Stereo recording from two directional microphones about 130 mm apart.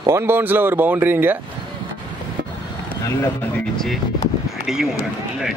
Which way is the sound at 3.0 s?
20° left (ahead or behind).